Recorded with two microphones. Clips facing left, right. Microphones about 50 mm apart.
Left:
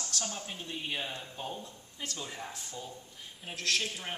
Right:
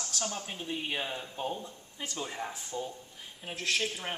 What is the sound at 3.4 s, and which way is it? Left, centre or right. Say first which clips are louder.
Speech: right 1 dB; centre.